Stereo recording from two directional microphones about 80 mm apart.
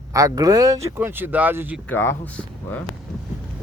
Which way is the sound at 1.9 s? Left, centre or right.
Left.